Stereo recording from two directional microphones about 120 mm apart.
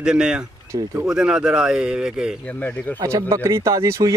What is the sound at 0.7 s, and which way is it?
Speech, 25° right (ahead or behind).